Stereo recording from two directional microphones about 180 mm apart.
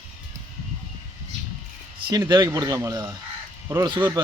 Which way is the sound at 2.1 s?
20° right (ahead or behind).